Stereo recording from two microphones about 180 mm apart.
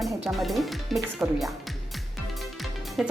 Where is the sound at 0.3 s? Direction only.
Centre (ahead or behind).